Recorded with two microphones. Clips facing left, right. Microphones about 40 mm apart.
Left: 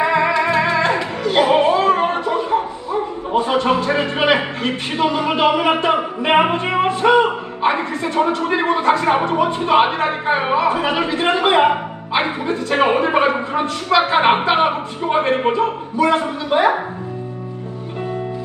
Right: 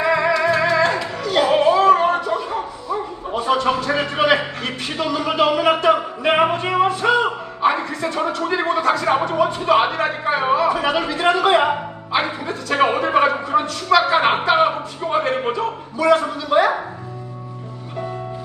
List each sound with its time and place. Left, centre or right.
0.0 s music: left
12.1 s speech: left